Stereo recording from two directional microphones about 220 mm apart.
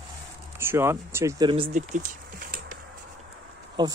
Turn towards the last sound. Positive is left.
turn(degrees=-20)  # may be behind; listen again after turning